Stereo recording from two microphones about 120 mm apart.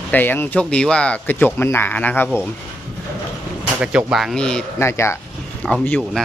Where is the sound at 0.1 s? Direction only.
15° left (ahead or behind).